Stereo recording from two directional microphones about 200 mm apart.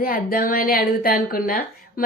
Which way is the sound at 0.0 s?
45° left (ahead or behind).